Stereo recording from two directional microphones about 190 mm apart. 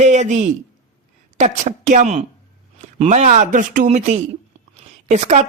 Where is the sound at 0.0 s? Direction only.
40° right (ahead or behind).